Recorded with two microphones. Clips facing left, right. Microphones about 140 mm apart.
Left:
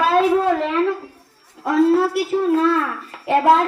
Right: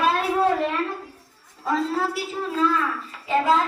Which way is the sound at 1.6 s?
65° left (ahead or behind).